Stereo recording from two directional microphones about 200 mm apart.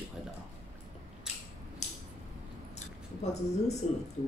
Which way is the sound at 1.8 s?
35° left (ahead or behind).